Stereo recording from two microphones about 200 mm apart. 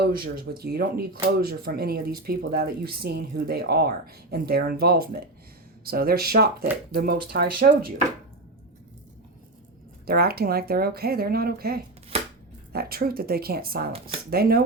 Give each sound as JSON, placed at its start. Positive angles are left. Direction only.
{"t": 0.0, "sound": "speech", "side_deg": -50}
{"t": 10.1, "sound": "speech", "side_deg": -50}
{"t": 12.1, "sound": "chopping", "side_deg": -30}
{"t": 12.7, "sound": "speech", "side_deg": -50}